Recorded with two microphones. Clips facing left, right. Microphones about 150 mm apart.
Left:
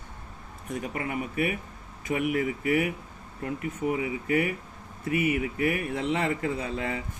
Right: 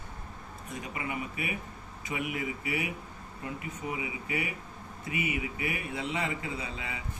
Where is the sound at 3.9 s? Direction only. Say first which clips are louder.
Left 8 dB; 45° left (ahead or behind).